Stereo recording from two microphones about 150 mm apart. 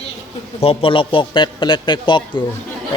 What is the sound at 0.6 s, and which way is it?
A man's voice, 40° left (ahead or behind).